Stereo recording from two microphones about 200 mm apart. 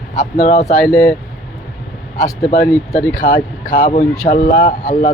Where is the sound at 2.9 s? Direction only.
40° left (ahead or behind).